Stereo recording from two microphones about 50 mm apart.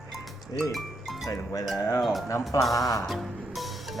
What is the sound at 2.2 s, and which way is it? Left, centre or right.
Speech, left.